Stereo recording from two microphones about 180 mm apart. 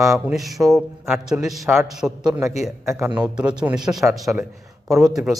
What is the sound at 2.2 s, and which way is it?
A man's voice, 20° right (ahead or behind).